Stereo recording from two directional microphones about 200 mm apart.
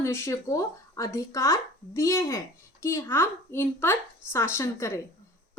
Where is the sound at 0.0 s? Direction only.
15° left (ahead or behind).